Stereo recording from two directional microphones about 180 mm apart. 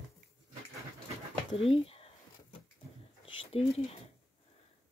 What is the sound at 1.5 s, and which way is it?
Speech, 30° left (ahead or behind).